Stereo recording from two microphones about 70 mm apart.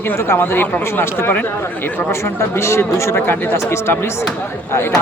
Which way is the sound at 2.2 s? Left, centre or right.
Left.